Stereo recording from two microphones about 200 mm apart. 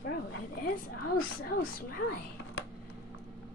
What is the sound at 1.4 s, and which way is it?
Speech, 50° left (ahead or behind).